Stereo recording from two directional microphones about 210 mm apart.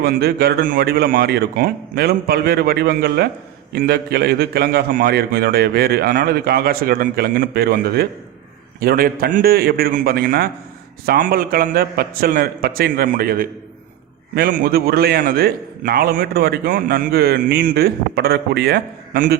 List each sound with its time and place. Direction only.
0.0 s a man's voice: 50° right (ahead or behind)